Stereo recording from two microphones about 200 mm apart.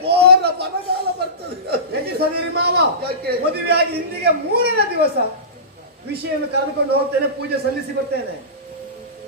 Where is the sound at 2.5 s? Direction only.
55° right (ahead or behind).